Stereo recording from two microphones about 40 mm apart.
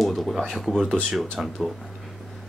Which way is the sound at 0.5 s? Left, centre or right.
Centre.